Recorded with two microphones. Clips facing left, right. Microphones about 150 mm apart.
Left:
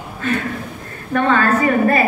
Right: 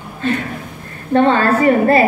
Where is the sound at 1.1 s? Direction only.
30° right (ahead or behind).